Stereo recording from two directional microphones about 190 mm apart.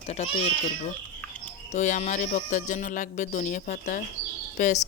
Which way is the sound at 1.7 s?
40° left (ahead or behind).